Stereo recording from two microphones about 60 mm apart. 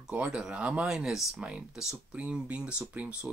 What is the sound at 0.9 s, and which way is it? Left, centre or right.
Speech, centre.